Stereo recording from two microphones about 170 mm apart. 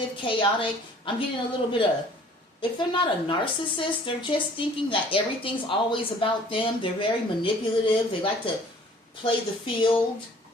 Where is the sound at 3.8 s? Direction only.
30° left (ahead or behind).